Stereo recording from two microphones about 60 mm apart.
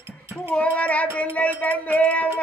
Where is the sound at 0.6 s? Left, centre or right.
Left.